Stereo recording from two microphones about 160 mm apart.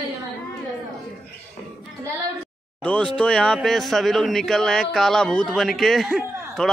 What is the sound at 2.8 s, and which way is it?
A man's voice, 5° left (ahead or behind).